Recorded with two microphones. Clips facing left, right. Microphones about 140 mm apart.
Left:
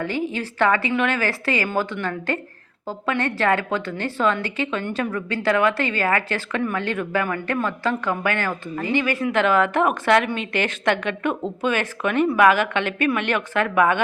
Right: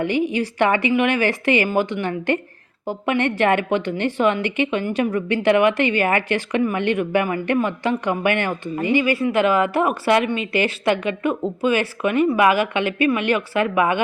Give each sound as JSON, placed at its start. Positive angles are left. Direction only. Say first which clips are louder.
{"t": 0.0, "sound": "a woman's voice", "louder": "right 5 dB", "side_deg": -15}